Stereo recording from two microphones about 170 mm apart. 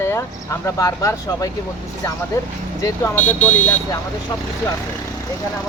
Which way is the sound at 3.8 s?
20° left (ahead or behind).